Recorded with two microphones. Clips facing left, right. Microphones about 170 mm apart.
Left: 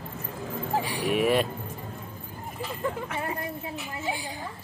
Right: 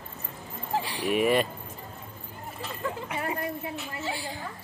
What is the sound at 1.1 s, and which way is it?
Speech, centre (ahead or behind).